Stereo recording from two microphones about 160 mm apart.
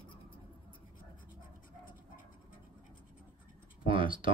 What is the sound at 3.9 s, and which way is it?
Speech, 30° right (ahead or behind).